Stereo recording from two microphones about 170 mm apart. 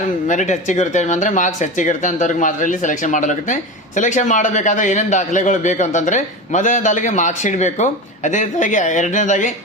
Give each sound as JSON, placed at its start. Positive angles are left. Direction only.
{"t": 0.3, "sound": "speech", "side_deg": 45}